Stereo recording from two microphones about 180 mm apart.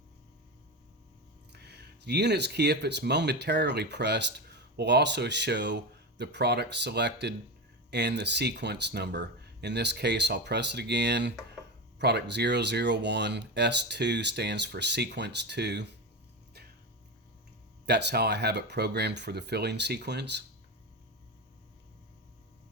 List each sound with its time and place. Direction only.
1.5 s speech: 65° right (ahead or behind)
17.8 s speech: 65° right (ahead or behind)